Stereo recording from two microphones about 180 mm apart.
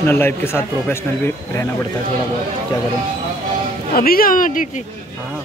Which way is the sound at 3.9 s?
55° left (ahead or behind).